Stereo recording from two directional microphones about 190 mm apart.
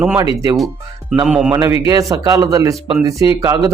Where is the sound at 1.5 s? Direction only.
15° right (ahead or behind).